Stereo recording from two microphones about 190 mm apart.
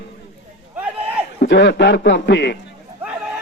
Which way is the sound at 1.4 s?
65° left (ahead or behind).